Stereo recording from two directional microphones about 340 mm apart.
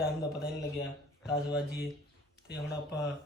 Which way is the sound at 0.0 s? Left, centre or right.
Centre.